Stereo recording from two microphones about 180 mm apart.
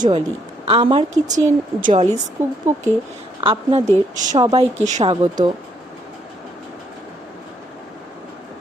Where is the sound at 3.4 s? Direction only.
30° right (ahead or behind).